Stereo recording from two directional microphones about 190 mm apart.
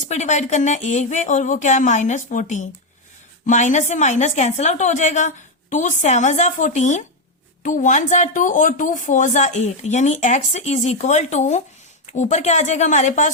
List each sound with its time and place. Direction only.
0.0 s a woman's voice: 40° left (ahead or behind)